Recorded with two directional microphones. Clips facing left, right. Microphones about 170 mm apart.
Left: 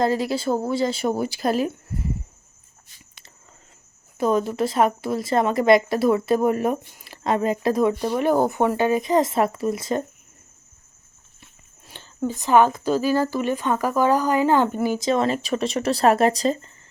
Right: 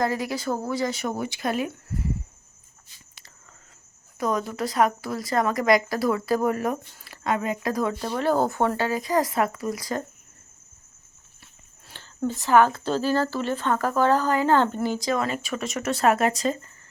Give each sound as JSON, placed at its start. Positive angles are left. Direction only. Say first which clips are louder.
{"t": 0.0, "sound": "a woman's voice", "louder": "left 4 dB", "side_deg": 30}
{"t": 4.2, "sound": "a woman's voice", "louder": "left 5 dB", "side_deg": 25}
{"t": 11.9, "sound": "a sound", "louder": "left 3 dB", "side_deg": 20}
{"t": 12.3, "sound": "speech", "louder": "left 2 dB", "side_deg": 20}